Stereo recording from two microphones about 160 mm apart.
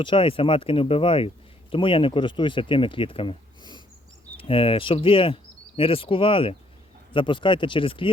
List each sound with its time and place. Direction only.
0.0 s speech: 30° left (ahead or behind)